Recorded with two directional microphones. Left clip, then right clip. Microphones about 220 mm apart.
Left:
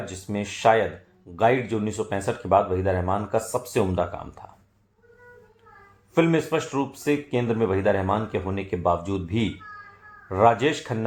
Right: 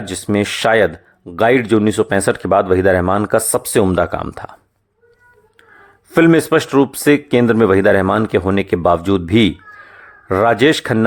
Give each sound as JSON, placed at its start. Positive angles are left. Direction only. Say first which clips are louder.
{"t": 0.1, "sound": "speech", "louder": "right 14 dB", "side_deg": -45}
{"t": 6.1, "sound": "speech", "louder": "right 11 dB", "side_deg": -45}